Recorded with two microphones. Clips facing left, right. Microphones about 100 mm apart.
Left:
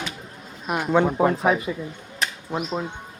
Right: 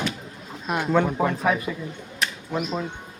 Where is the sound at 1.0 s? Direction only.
30° left (ahead or behind).